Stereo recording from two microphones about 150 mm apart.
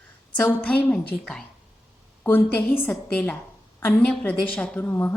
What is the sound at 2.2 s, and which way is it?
A woman's voice, 15° left (ahead or behind).